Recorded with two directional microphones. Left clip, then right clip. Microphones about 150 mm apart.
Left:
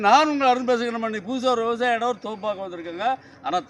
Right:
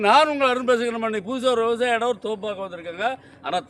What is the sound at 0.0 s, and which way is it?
A man's voice, 60° right (ahead or behind).